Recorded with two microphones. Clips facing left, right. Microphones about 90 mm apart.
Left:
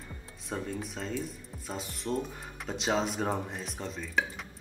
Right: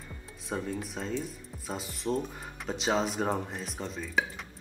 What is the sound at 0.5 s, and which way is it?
Speech, centre (ahead or behind).